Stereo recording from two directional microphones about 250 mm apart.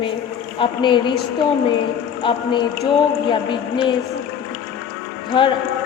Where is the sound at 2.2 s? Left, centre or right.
Centre.